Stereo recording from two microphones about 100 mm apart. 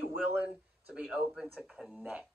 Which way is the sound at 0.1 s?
20° right (ahead or behind).